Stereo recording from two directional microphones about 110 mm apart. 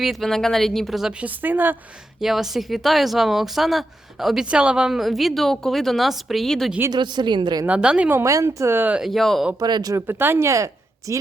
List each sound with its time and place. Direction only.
0.0 s speech: centre (ahead or behind)
1.2 s a woman's voice: 15° right (ahead or behind)
2.2 s speech: centre (ahead or behind)
6.9 s a woman's voice: 45° right (ahead or behind)
7.7 s a woman's voice: 10° right (ahead or behind)
8.2 s speech: 30° right (ahead or behind)
9.0 s speech: centre (ahead or behind)
9.6 s speech: 40° right (ahead or behind)
10.1 s speech: 20° right (ahead or behind)